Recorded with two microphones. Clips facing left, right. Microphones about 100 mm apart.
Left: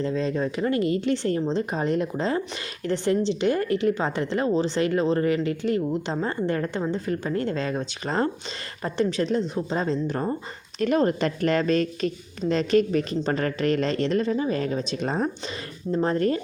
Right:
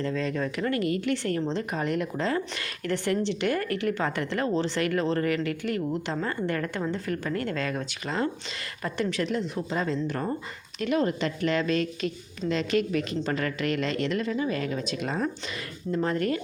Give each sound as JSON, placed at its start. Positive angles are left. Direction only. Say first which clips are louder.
{"t": 0.0, "sound": "a woman's voice", "louder": "left 3 dB", "side_deg": 25}
{"t": 1.7, "sound": "a woman's voice", "louder": "left 3 dB", "side_deg": 25}
{"t": 10.8, "sound": "a woman's voice", "louder": "left 4 dB", "side_deg": 40}